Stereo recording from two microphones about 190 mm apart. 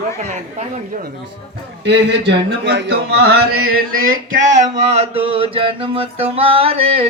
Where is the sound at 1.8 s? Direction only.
65° right (ahead or behind).